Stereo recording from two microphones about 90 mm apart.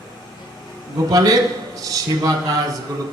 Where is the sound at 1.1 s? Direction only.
45° right (ahead or behind).